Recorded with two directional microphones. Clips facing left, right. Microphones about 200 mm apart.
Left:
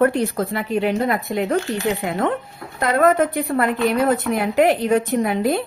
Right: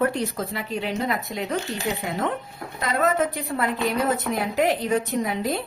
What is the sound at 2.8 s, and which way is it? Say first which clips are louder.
A woman's voice: left 6 dB; 60° left (ahead or behind).